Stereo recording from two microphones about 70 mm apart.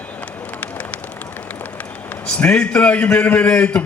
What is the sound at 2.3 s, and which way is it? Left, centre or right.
A man's voice, centre.